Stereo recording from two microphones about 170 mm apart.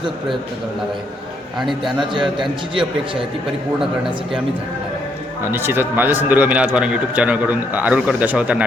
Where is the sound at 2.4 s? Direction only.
30° right (ahead or behind).